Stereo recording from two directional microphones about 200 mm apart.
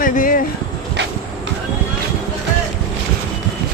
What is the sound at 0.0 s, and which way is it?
Speech, 45° left (ahead or behind).